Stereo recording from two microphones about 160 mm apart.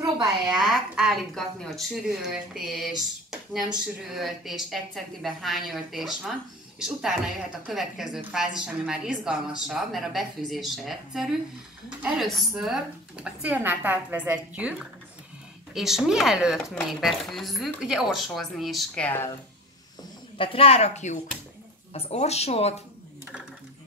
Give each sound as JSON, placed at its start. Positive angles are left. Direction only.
{"t": 0.2, "sound": "a woman's voice", "side_deg": -5}
{"t": 20.3, "sound": "speech", "side_deg": 35}